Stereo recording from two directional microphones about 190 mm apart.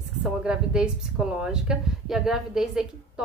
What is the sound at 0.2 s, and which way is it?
Speech, 5° right (ahead or behind).